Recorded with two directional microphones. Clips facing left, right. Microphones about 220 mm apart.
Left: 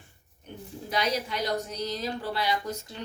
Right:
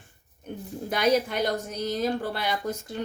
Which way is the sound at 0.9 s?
50° right (ahead or behind).